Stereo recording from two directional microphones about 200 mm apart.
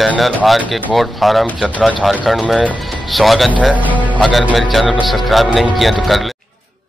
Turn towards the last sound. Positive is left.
turn(degrees=0)  # may be behind; listen again after turning